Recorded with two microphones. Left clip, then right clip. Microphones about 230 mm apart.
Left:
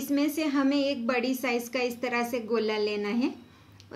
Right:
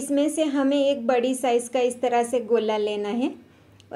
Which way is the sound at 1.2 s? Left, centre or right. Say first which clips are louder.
Right 7 dB; centre.